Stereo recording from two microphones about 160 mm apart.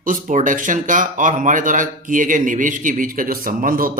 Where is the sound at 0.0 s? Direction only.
55° right (ahead or behind).